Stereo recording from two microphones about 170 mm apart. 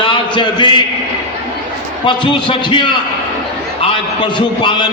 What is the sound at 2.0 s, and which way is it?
Speech, 30° left (ahead or behind).